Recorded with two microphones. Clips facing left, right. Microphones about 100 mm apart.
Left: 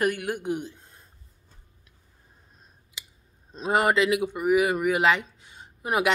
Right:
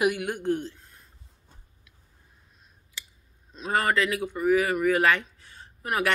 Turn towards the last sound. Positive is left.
turn(degrees=15)  # may be behind; listen again after turning